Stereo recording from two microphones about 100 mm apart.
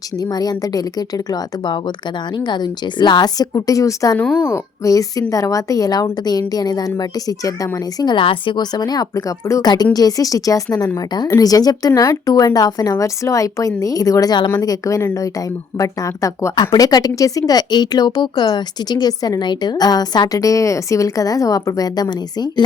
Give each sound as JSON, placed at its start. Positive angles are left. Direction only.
{"t": 0.2, "sound": "speech", "side_deg": 40}
{"t": 8.1, "sound": "a woman's voice", "side_deg": 60}